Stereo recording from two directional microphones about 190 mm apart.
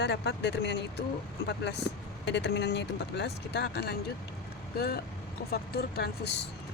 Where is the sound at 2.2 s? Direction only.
65° left (ahead or behind).